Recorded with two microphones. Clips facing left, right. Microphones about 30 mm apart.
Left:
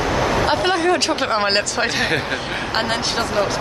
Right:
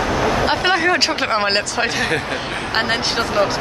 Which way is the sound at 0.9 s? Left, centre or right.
Centre.